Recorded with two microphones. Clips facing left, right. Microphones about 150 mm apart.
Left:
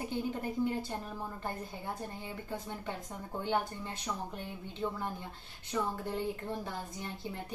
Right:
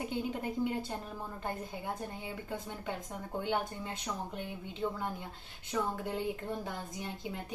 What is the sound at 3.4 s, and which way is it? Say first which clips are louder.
Speech: left 1 dB; 15° right (ahead or behind).